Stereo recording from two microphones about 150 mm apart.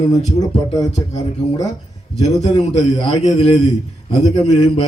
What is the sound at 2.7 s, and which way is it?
A man's voice, 30° left (ahead or behind).